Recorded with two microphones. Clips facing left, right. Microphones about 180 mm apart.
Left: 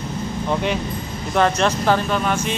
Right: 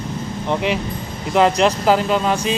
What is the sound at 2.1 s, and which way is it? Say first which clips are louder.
Speech: right 3 dB; 25° right (ahead or behind).